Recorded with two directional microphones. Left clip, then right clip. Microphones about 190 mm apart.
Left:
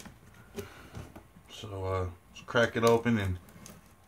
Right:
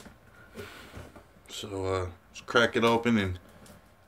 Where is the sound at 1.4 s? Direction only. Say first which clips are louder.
Right 4 dB; 45° right (ahead or behind).